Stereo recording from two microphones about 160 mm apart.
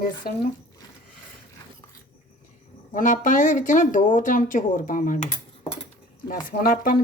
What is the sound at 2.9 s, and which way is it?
Speech, 55° left (ahead or behind).